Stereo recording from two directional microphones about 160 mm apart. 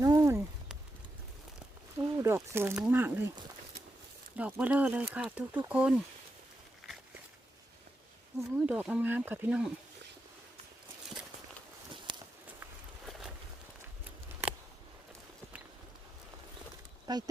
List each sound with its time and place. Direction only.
0.0 s speech: 20° right (ahead or behind)
2.0 s a sound: 20° right (ahead or behind)
2.7 s speech: 10° right (ahead or behind)
4.4 s speech: 10° right (ahead or behind)
8.4 s speech: 5° right (ahead or behind)
13.1 s a sound: centre (ahead or behind)
17.1 s speech: 25° right (ahead or behind)